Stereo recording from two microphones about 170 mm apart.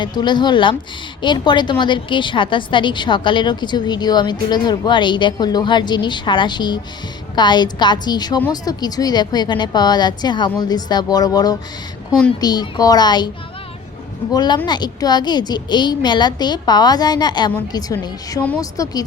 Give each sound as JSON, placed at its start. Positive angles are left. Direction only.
{"t": 0.0, "sound": "a woman's voice", "side_deg": 25}
{"t": 14.3, "sound": "a woman's voice", "side_deg": 25}